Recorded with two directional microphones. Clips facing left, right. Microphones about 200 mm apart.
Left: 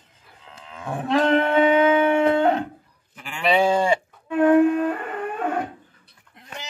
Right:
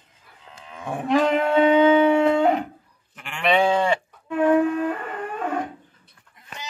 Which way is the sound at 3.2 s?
5° left (ahead or behind).